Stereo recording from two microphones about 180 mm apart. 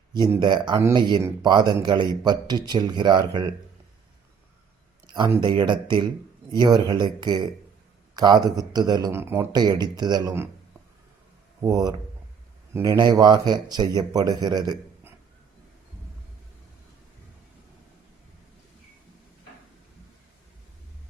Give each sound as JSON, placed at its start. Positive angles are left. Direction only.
{"t": 0.3, "sound": "speech", "side_deg": -25}
{"t": 5.0, "sound": "a sound", "side_deg": -25}
{"t": 5.4, "sound": "speech", "side_deg": -25}
{"t": 11.6, "sound": "speech", "side_deg": -20}